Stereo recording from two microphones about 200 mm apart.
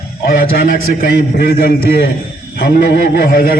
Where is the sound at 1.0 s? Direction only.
50° left (ahead or behind).